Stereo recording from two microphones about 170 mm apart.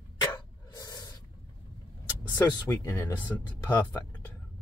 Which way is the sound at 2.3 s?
25° left (ahead or behind).